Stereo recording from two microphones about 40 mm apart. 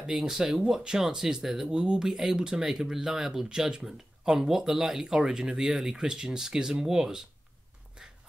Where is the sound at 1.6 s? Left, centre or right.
Right.